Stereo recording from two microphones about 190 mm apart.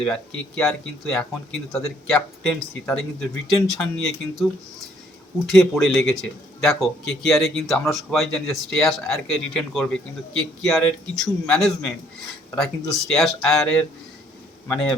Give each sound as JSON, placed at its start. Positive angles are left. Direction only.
{"t": 0.0, "sound": "speech", "side_deg": 5}
{"t": 5.5, "sound": "speech", "side_deg": 0}